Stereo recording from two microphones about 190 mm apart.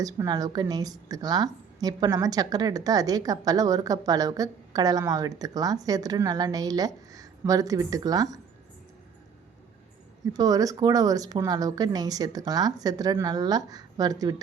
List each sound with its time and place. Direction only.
0.0 s a woman's voice: 20° right (ahead or behind)
10.3 s a woman's voice: 20° right (ahead or behind)